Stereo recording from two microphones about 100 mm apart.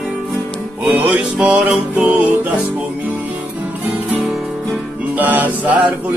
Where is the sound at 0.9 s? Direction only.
15° right (ahead or behind).